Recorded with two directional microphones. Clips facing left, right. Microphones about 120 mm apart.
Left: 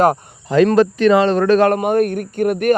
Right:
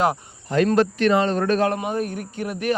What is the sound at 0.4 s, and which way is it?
Speech, 90° left.